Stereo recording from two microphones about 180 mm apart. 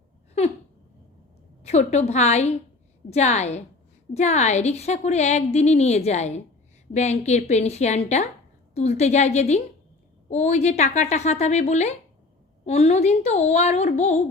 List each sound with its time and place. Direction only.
1.6 s a woman's voice: 40° left (ahead or behind)